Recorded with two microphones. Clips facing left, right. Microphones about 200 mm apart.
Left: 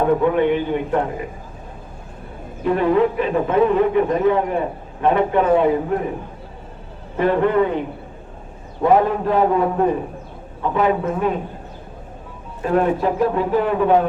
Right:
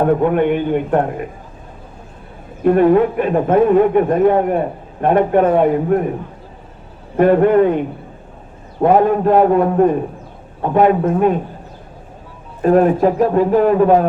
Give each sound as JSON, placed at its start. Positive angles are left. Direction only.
{"t": 0.2, "sound": "a man's voice", "side_deg": -50}
{"t": 2.6, "sound": "a man's voice", "side_deg": -50}
{"t": 7.2, "sound": "a man's voice", "side_deg": -50}
{"t": 8.8, "sound": "a man's voice", "side_deg": -50}
{"t": 12.6, "sound": "a man's voice", "side_deg": -45}